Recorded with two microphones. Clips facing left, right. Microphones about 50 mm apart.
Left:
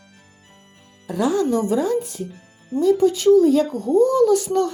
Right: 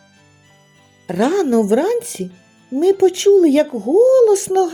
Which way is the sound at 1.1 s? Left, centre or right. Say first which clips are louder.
Right 4 dB; right.